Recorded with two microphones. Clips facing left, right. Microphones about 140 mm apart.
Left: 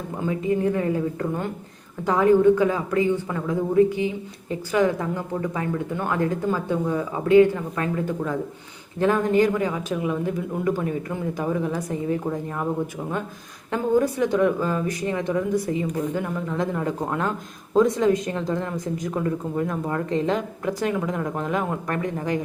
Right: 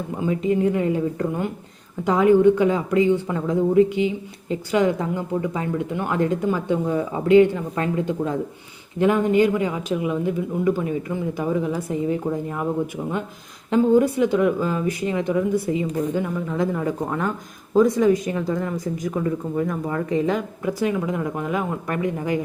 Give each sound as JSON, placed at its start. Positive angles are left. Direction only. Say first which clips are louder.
{"t": 0.3, "sound": "a woman's voice", "louder": "right 2 dB", "side_deg": -20}
{"t": 13.7, "sound": "speech", "louder": "right 4 dB", "side_deg": -15}